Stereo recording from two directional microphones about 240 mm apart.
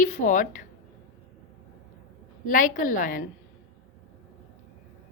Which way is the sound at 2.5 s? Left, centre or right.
Left.